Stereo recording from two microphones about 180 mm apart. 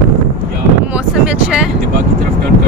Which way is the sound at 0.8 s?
5° right (ahead or behind).